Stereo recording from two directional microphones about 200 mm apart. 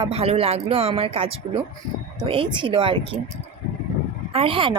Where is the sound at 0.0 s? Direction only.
30° right (ahead or behind).